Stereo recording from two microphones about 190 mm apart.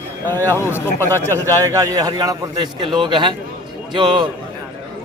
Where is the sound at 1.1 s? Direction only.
15° right (ahead or behind).